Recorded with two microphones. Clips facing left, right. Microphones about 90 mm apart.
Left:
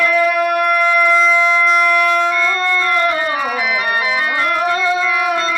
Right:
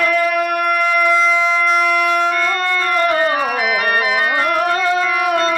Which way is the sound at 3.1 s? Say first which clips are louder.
Right 2 dB; 45° right (ahead or behind).